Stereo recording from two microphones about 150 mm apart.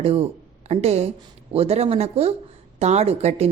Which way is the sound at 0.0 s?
40° right (ahead or behind).